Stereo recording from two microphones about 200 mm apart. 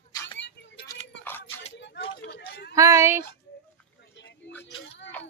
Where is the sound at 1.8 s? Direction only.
60° left (ahead or behind).